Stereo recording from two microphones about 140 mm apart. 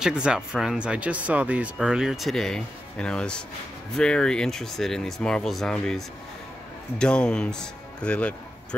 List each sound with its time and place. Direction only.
0.0 s speech: 5° right (ahead or behind)